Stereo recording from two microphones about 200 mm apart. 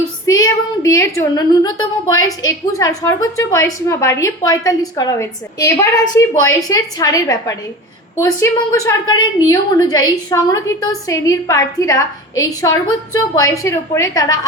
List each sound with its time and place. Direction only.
0.3 s a woman's voice: 15° left (ahead or behind)